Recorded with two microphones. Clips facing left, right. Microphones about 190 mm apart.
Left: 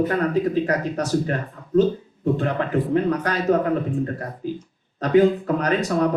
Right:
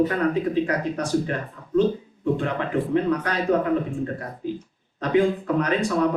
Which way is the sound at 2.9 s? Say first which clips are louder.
Even; 40° left (ahead or behind).